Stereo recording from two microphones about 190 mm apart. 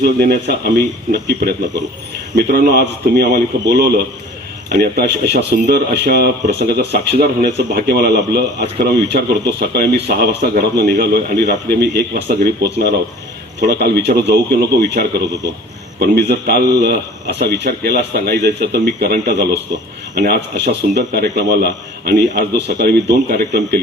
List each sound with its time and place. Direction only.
0.0 s speech: 55° right (ahead or behind)
16.3 s speech: 55° right (ahead or behind)